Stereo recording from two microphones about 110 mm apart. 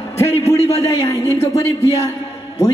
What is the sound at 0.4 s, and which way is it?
Speech, 70° left (ahead or behind).